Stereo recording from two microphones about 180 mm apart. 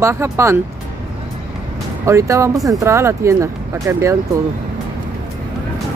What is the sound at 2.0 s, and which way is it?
Speech, 15° right (ahead or behind).